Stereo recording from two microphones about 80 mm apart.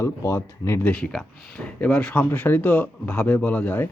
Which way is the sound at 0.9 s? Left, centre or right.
Centre.